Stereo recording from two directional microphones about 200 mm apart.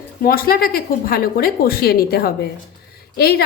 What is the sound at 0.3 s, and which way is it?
A woman's voice, 45° left (ahead or behind).